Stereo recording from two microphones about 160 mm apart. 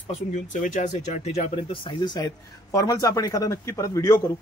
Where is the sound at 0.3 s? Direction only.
50° left (ahead or behind); by 4.2 s 20° left (ahead or behind).